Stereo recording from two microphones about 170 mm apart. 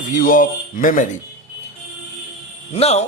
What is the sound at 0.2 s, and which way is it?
Speech, 55° left (ahead or behind).